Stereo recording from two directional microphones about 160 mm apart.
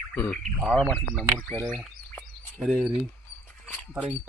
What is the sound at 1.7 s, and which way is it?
Bird, centre (ahead or behind).